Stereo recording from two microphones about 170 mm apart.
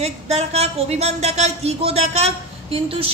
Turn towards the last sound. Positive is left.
turn(degrees=-35)  # may be behind; listen again after turning